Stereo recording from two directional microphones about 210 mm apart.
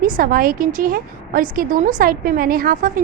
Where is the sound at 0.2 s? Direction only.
45° right (ahead or behind).